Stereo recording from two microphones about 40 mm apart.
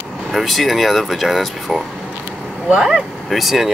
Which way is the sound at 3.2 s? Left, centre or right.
Centre.